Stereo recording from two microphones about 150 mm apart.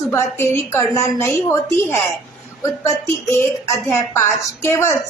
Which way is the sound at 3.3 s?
15° left (ahead or behind).